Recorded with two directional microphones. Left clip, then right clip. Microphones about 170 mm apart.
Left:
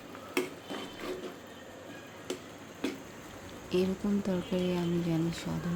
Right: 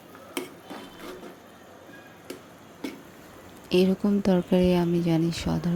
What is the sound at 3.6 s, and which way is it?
Speech, 45° right (ahead or behind).